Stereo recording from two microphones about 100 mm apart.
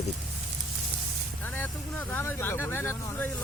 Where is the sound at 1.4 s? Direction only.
20° left (ahead or behind).